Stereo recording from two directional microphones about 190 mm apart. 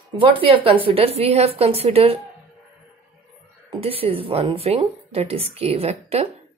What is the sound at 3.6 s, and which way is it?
A woman's voice, 30° right (ahead or behind).